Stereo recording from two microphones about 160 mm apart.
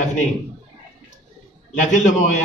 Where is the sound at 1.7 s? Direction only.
50° left (ahead or behind).